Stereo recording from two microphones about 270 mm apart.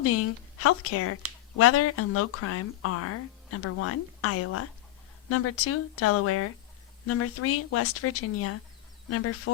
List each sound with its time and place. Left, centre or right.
0.0 s speech: left